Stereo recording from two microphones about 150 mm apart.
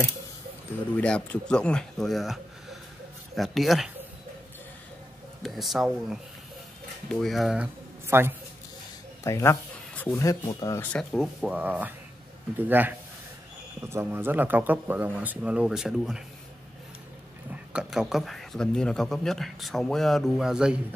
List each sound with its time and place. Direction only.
0.9 s a man's voice: 10° left (ahead or behind)
5.4 s a man's voice: centre (ahead or behind)
9.2 s a man's voice: 20° left (ahead or behind); by 16.2 s 5° right (ahead or behind)
17.7 s a man's voice: 5° right (ahead or behind)